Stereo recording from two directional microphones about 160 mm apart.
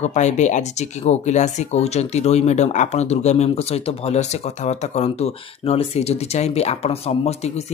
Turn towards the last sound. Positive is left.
turn(degrees=40)  # may be behind; listen again after turning